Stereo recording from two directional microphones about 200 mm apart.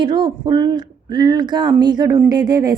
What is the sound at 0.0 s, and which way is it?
Speech, 20° right (ahead or behind).